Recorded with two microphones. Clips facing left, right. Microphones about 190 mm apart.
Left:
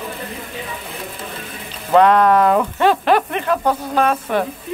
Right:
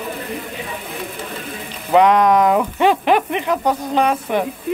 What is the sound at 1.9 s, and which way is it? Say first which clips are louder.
Speech: even; 15° right (ahead or behind).